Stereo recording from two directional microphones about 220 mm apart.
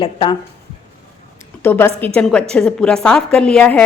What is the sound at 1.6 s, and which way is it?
A woman's voice, 10° left (ahead or behind).